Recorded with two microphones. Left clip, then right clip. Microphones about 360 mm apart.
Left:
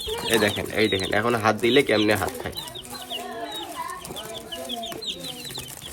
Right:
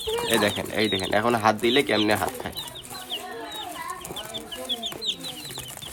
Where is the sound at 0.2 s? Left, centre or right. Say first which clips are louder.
Left 2 dB; centre.